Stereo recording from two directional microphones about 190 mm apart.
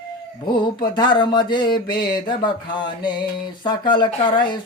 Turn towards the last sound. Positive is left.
turn(degrees=25)  # may be behind; listen again after turning